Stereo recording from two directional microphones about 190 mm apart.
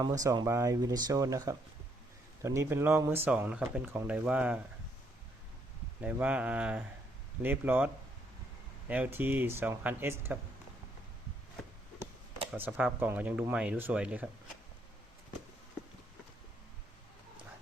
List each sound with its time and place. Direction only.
0.0 s speech: 20° right (ahead or behind)
6.0 s speech: 5° right (ahead or behind)
8.9 s speech: 10° right (ahead or behind)
12.5 s speech: 10° right (ahead or behind)